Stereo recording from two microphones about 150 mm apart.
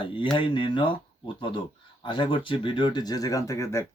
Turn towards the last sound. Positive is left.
turn(degrees=20)  # may be behind; listen again after turning